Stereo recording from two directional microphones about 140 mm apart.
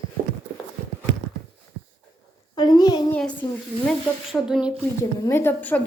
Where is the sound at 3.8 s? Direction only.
Centre (ahead or behind).